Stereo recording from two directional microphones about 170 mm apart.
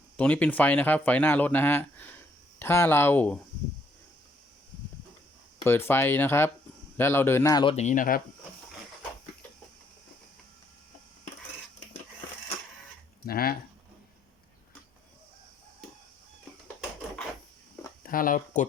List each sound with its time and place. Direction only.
0.2 s speech: 5° left (ahead or behind)
5.6 s speech: 15° left (ahead or behind)
7.6 s speech: 30° left (ahead or behind)
7.9 s speech: 55° left (ahead or behind)
13.2 s speech: 60° left (ahead or behind)
18.0 s speech: 55° left (ahead or behind)